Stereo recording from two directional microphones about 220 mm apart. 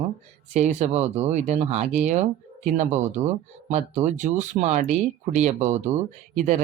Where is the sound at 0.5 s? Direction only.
30° right (ahead or behind).